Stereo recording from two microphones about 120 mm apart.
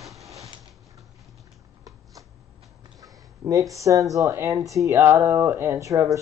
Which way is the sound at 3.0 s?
30° right (ahead or behind).